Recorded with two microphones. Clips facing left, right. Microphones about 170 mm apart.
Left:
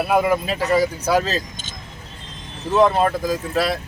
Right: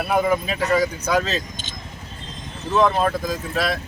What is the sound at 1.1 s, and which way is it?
Speech, 35° left (ahead or behind).